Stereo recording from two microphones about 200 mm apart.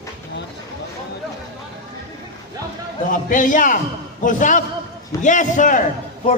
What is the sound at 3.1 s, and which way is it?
A man's voice, 40° left (ahead or behind).